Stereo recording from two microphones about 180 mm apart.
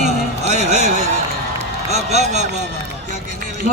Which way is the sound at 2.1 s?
40° right (ahead or behind).